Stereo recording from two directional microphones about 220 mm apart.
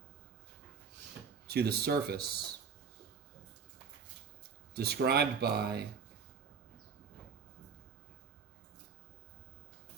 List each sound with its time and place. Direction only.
1.5 s speech: 45° right (ahead or behind)
4.7 s speech: 45° right (ahead or behind)